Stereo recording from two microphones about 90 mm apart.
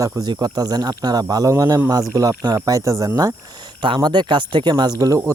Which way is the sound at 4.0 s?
55° right (ahead or behind).